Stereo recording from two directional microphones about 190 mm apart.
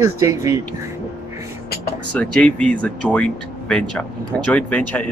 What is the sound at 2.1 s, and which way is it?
Speech, 5° left (ahead or behind).